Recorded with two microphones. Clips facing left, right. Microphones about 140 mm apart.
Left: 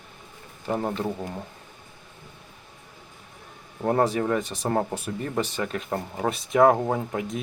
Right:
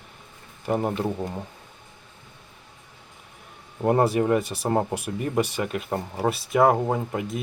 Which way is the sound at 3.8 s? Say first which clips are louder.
Right 2 dB; 15° right (ahead or behind).